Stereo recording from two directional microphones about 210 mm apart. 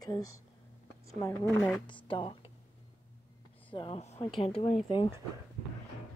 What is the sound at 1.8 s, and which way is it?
Speech, 25° left (ahead or behind).